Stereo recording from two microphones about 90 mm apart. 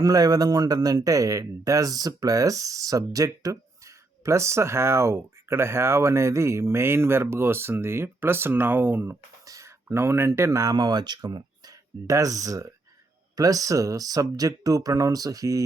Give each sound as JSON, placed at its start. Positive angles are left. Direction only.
{"t": 0.0, "sound": "speech", "side_deg": -45}
{"t": 9.4, "sound": "speech", "side_deg": -35}
{"t": 10.8, "sound": "speech", "side_deg": -50}